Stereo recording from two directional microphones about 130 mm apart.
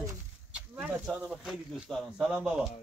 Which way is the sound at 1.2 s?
Centre (ahead or behind).